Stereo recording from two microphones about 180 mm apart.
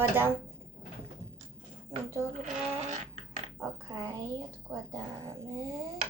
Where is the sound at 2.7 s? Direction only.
40° right (ahead or behind).